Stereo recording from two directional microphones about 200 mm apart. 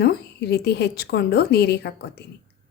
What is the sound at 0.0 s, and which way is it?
A woman's voice, 55° left (ahead or behind).